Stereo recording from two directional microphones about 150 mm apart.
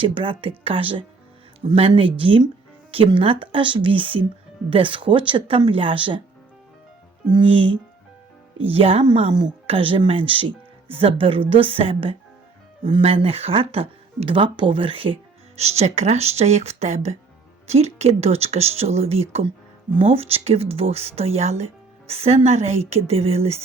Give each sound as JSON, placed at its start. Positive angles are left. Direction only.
{"t": 0.0, "sound": "speech", "side_deg": -35}
{"t": 7.3, "sound": "speech", "side_deg": -35}